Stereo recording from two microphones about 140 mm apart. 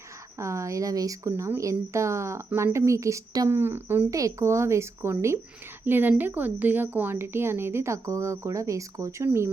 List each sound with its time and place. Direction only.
0.3 s a woman's voice: 20° right (ahead or behind)